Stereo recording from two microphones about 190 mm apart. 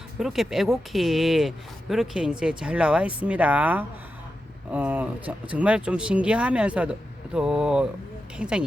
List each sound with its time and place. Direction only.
0.2 s speech: centre (ahead or behind)